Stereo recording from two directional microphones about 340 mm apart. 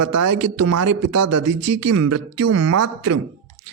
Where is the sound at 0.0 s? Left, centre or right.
Right.